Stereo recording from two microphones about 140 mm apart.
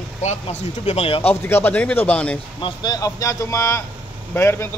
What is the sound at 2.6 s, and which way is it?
Speech, 35° left (ahead or behind).